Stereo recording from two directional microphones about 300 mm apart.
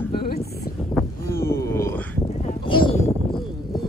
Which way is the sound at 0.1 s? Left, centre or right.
Left.